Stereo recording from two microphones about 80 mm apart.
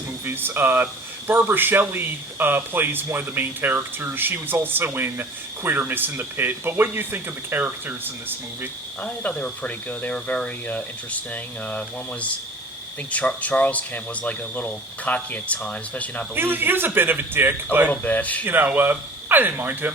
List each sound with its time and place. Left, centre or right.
0.3 s speech: right
9.0 s speech: centre
16.3 s speech: right
17.8 s speech: centre
18.4 s speech: right